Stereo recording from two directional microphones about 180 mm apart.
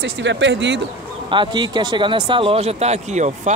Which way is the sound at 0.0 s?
75° right (ahead or behind).